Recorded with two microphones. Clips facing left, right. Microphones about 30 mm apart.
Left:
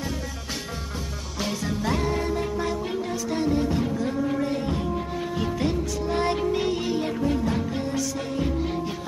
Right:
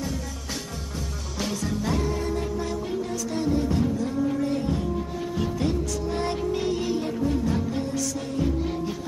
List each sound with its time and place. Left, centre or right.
1.4 s music: centre